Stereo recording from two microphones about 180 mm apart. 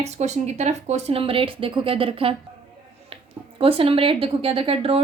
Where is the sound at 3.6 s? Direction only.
30° right (ahead or behind).